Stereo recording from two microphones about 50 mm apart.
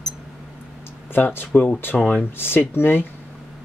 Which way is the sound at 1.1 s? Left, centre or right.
Left.